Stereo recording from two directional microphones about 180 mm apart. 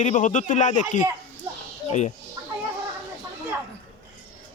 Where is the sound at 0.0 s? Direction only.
45° left (ahead or behind).